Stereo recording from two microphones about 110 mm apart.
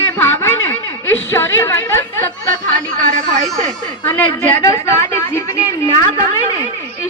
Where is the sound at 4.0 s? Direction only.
20° left (ahead or behind).